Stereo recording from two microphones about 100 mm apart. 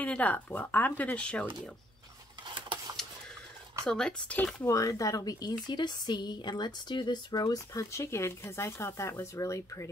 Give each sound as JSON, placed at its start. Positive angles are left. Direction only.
{"t": 0.0, "sound": "speech", "side_deg": 15}
{"t": 2.4, "sound": "a sound", "side_deg": -55}
{"t": 3.8, "sound": "speech", "side_deg": 10}
{"t": 4.6, "sound": "a woman's voice", "side_deg": 35}